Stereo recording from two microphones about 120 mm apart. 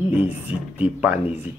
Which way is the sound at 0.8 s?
10° right (ahead or behind).